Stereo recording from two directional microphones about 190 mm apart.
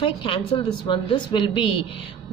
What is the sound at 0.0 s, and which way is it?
Speech, 25° left (ahead or behind).